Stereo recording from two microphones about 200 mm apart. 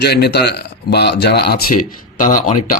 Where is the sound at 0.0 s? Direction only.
55° left (ahead or behind).